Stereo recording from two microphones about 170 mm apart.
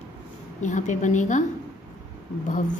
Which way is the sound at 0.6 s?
45° left (ahead or behind).